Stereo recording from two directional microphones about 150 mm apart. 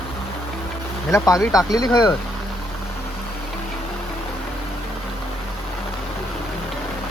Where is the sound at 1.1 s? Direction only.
20° left (ahead or behind).